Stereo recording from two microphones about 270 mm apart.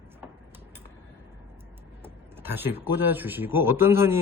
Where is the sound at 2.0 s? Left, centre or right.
Centre.